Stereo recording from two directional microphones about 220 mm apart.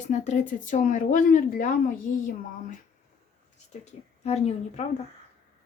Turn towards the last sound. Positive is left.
turn(degrees=30)  # may be behind; listen again after turning